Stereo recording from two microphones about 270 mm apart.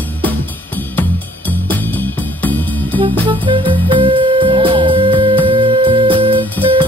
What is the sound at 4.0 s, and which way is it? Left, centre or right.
Music, centre.